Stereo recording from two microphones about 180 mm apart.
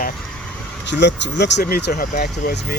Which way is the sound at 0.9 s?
75° left (ahead or behind).